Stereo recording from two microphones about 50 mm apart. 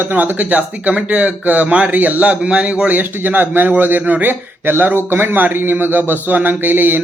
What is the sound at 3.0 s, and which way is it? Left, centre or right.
Speech, right.